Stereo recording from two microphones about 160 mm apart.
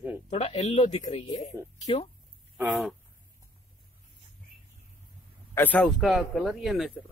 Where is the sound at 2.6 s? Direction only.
Centre (ahead or behind).